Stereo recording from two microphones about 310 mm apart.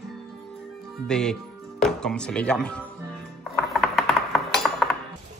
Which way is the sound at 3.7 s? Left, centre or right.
Centre.